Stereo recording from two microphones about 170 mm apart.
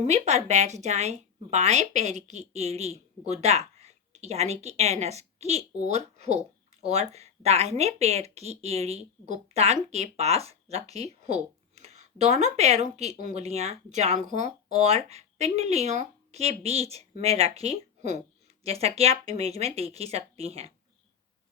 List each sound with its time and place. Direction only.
0.0 s a woman's voice: 40° right (ahead or behind)